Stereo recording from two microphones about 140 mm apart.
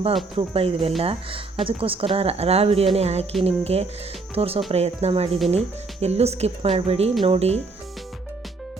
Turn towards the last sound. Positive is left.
turn(degrees=-45)  # may be behind; listen again after turning